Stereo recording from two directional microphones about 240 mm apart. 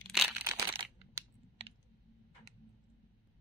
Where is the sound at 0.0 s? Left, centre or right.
Centre.